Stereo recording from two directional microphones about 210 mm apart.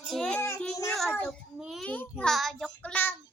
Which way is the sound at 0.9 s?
5° left (ahead or behind).